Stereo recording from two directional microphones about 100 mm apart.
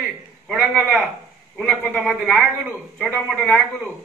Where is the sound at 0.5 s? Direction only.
Centre (ahead or behind).